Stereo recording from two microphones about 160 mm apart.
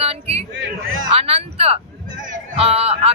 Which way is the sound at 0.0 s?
40° right (ahead or behind).